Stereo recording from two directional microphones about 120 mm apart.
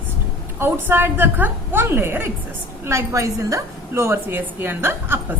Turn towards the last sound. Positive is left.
turn(degrees=-20)  # may be behind; listen again after turning